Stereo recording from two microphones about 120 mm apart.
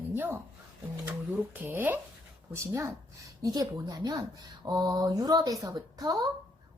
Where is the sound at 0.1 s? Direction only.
20° right (ahead or behind).